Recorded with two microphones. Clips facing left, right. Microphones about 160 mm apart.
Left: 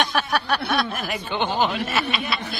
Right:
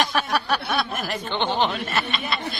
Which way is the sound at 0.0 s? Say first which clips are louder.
Even; centre (ahead or behind).